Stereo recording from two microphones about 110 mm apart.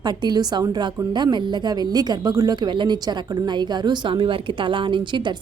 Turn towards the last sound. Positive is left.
turn(degrees=-45)  # may be behind; listen again after turning